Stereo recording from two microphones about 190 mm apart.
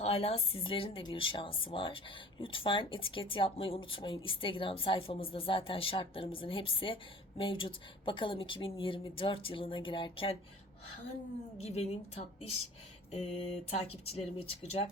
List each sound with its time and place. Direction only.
0.0 s speech: 30° left (ahead or behind)
11.6 s speech: 35° left (ahead or behind)